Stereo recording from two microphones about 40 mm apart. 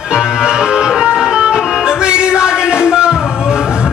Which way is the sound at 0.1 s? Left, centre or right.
Centre.